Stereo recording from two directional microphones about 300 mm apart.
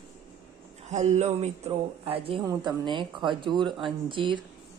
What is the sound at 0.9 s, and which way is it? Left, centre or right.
Speech, right.